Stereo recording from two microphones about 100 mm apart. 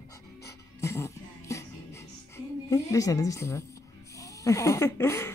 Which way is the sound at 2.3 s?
30° left (ahead or behind).